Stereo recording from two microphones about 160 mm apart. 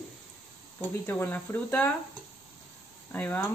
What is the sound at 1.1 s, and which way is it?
Speech, 10° left (ahead or behind).